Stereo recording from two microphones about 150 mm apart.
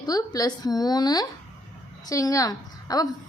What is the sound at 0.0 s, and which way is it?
A woman's voice, 25° left (ahead or behind).